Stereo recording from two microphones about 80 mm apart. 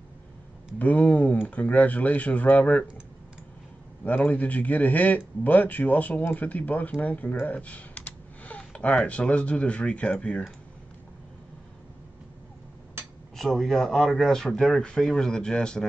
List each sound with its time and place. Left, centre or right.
0.7 s speech: centre
4.0 s speech: centre
13.4 s speech: centre